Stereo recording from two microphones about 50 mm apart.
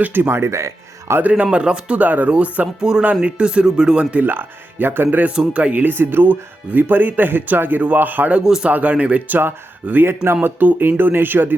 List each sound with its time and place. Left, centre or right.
0.0 s speech: right
1.2 s speech: right
1.5 s speech: centre
2.0 s speech: right
3.4 s speech: centre
4.1 s speech: right
5.3 s speech: centre
5.7 s speech: right